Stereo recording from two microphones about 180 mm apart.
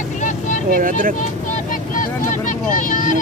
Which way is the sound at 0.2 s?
45° left (ahead or behind).